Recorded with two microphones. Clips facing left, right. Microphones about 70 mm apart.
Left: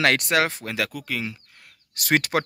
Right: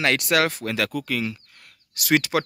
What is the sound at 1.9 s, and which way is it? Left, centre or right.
Speech, left.